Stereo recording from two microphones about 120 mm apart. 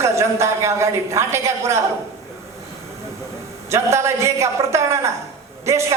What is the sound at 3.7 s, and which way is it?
Speech, 25° right (ahead or behind).